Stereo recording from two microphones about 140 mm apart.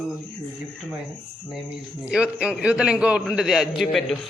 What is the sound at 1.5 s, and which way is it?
A man's voice, 5° right (ahead or behind).